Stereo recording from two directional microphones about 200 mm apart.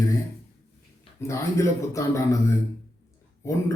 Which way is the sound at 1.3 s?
15° left (ahead or behind).